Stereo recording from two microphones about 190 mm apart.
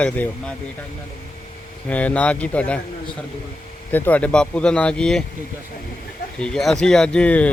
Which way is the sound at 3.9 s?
10° left (ahead or behind).